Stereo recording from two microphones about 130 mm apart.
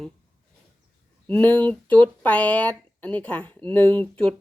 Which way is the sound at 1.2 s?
15° left (ahead or behind).